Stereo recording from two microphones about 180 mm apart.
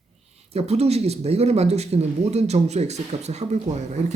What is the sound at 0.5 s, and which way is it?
Speech, 35° right (ahead or behind).